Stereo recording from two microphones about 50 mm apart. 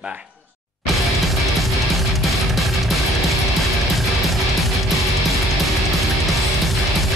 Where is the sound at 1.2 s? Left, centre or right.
Centre.